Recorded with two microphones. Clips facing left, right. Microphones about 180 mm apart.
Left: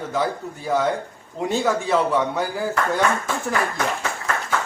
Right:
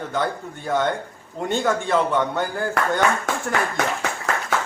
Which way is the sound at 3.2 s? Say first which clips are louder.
Even; 80° right.